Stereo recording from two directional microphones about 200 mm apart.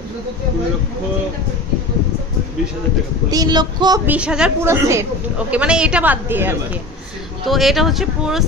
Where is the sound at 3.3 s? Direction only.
20° right (ahead or behind).